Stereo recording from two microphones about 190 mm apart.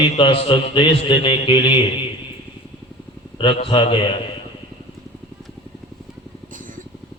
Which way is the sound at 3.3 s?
25° left (ahead or behind).